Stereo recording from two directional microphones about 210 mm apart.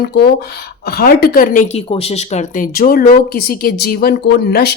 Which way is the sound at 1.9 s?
30° left (ahead or behind).